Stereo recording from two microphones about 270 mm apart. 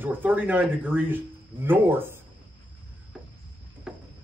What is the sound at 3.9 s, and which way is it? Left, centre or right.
Cricket, centre.